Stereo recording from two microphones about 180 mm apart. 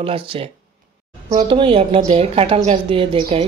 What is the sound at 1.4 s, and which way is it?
A woman's voice, 30° right (ahead or behind).